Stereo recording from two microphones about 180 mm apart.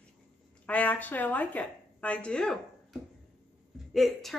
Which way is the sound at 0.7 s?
10° left (ahead or behind).